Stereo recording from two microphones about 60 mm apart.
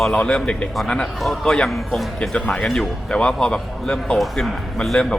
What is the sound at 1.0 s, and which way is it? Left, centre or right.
Speech, centre.